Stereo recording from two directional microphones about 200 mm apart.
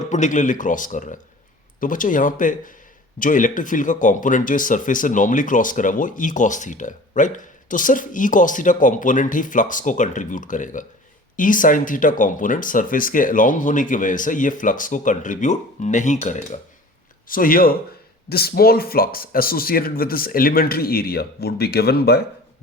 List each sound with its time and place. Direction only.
0.0 s a man's voice: 40° left (ahead or behind)